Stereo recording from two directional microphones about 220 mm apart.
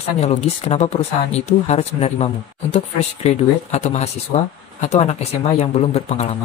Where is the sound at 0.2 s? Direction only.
30° left (ahead or behind).